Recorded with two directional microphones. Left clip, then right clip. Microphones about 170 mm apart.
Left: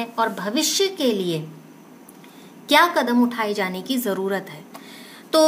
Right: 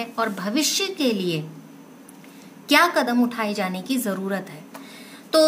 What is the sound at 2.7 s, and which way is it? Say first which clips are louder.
A woman's voice: left 1 dB; 10° left (ahead or behind).